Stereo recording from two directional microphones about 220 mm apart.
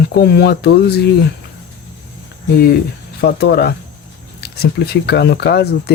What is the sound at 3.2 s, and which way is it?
Speech, 50° left (ahead or behind).